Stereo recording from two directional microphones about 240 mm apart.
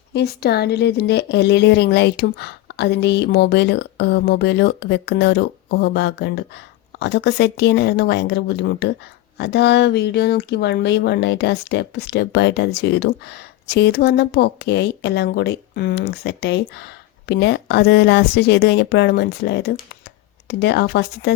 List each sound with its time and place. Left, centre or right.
0.1 s speech: left